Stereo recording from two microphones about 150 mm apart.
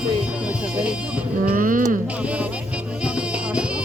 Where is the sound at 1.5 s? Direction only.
65° right (ahead or behind).